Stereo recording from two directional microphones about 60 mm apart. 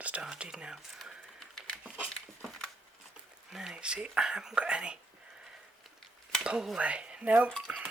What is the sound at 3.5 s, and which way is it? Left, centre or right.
Speech, centre.